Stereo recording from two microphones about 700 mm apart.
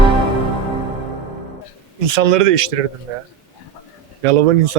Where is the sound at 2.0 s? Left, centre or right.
Right.